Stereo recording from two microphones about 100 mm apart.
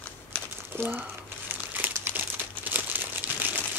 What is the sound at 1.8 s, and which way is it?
Crumpling, 20° right (ahead or behind).